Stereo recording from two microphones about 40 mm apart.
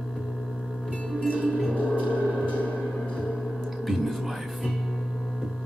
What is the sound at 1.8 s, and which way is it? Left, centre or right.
Gong, left.